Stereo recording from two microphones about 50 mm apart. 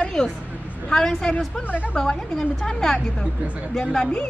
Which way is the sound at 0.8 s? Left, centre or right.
Centre.